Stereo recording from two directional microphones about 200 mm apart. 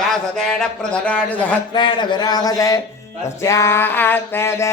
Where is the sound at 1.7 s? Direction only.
20° left (ahead or behind).